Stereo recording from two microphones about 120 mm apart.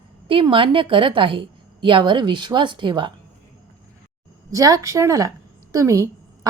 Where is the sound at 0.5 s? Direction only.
45° right (ahead or behind).